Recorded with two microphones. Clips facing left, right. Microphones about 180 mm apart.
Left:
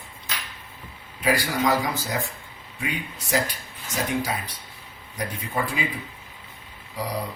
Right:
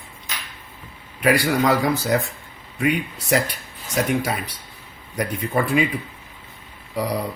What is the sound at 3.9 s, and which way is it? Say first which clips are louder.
Speech: right 5 dB; 65° right (ahead or behind).